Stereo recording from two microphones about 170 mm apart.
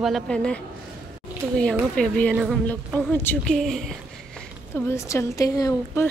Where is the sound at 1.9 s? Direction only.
5° left (ahead or behind).